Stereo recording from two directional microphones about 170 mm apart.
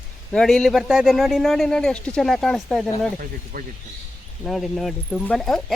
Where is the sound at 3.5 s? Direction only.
60° right (ahead or behind).